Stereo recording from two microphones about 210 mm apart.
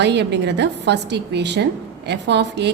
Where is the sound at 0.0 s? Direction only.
55° right (ahead or behind).